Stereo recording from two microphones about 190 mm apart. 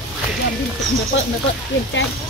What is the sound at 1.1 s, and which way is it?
Speech, 75° left (ahead or behind).